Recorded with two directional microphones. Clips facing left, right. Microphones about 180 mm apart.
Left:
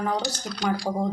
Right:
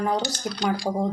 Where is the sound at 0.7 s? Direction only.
15° right (ahead or behind).